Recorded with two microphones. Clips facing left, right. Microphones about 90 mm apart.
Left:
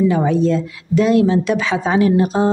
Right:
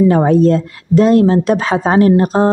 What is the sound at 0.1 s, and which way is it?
Speech, 50° right (ahead or behind).